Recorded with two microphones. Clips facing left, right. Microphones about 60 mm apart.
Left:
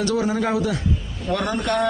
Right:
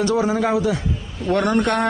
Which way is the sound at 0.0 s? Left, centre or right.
Right.